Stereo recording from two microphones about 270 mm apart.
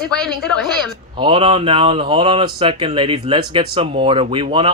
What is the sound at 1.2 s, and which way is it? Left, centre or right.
Speech, centre.